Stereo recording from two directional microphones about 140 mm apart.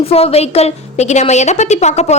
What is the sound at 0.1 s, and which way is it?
A woman's voice, 45° left (ahead or behind).